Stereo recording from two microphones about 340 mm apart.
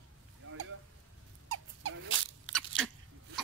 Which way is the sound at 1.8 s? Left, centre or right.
Right.